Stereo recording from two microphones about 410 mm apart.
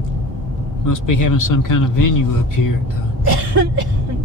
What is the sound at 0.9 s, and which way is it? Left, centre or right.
Speech, left.